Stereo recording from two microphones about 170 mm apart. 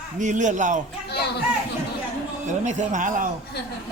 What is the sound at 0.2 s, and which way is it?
Speech, 45° right (ahead or behind).